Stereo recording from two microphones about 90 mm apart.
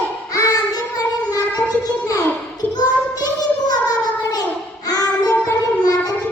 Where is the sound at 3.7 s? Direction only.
45° left (ahead or behind).